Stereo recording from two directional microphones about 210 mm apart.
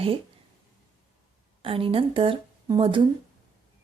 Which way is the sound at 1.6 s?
25° right (ahead or behind).